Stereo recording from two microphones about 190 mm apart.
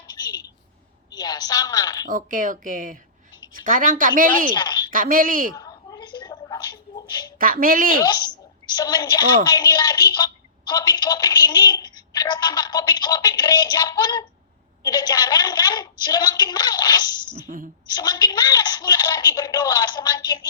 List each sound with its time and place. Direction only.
0.1 s a sound: 20° left (ahead or behind)
1.1 s a woman's voice: 20° left (ahead or behind)
2.0 s a woman's voice: 45° right (ahead or behind)
4.5 s a sound: 25° left (ahead or behind)
4.9 s a woman's voice: 45° right (ahead or behind)
5.5 s a sound: 20° left (ahead or behind)
7.3 s a woman's voice: 45° right (ahead or behind)
7.9 s a woman's voice: 20° left (ahead or behind)
17.3 s a woman's voice: 45° right (ahead or behind)
17.8 s a woman's voice: 20° left (ahead or behind)